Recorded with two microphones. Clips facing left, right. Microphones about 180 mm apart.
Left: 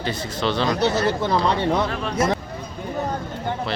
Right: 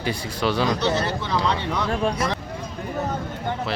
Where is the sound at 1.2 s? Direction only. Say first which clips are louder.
Left 4 dB; 50° left (ahead or behind).